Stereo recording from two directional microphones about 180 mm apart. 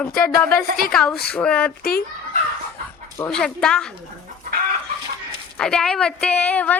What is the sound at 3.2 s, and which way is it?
Speech, 5° left (ahead or behind).